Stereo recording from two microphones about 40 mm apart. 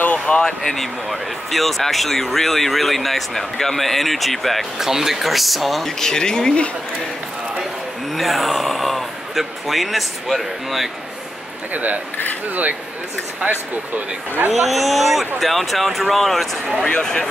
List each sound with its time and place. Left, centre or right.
0.0 s a sound: left
0.5 s speech: centre
4.7 s speech: centre
5.9 s speech: centre
8.1 s speech: centre
11.7 s speech: right
14.5 s speech: centre
16.8 s speech: centre